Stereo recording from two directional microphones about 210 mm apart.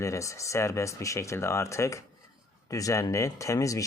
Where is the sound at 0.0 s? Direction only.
15° left (ahead or behind).